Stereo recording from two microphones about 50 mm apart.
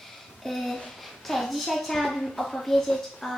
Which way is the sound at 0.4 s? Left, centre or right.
Centre.